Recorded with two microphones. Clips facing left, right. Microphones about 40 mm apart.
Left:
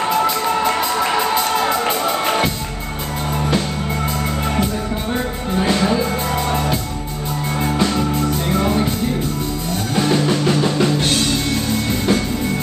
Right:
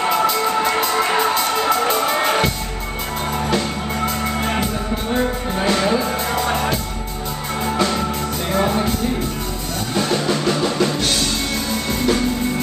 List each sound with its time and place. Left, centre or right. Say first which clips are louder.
0.1 s music: left 1 dB; centre
6.4 s music: even; right
9.9 s music: left 2 dB; left